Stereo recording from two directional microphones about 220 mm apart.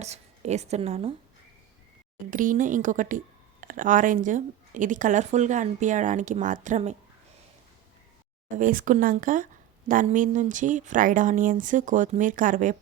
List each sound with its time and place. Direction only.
0.0 s a woman's voice: 30° right (ahead or behind)
2.3 s speech: 35° right (ahead or behind)
8.5 s speech: 35° right (ahead or behind)